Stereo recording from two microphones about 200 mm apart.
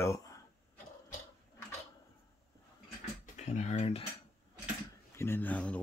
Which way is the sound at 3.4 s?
35° left (ahead or behind).